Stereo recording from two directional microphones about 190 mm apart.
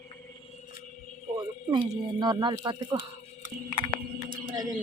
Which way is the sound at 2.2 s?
25° right (ahead or behind).